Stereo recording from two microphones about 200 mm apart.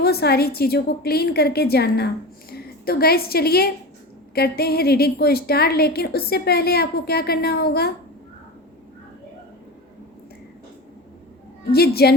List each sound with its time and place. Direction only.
0.0 s a woman's voice: 50° left (ahead or behind)
11.7 s a woman's voice: 50° left (ahead or behind)